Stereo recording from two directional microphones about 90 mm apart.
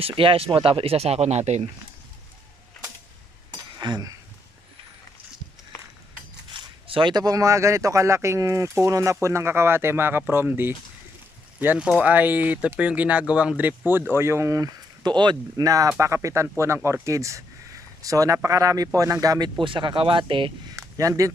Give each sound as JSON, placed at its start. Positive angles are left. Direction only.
{"t": 0.0, "sound": "speech", "side_deg": -80}
{"t": 3.8, "sound": "speech", "side_deg": -50}
{"t": 6.5, "sound": "zipper", "side_deg": -70}
{"t": 7.1, "sound": "speech", "side_deg": -45}
{"t": 11.8, "sound": "speech", "side_deg": -10}
{"t": 15.0, "sound": "speech", "side_deg": -55}
{"t": 19.6, "sound": "speech", "side_deg": -65}
{"t": 20.7, "sound": "a sound", "side_deg": -40}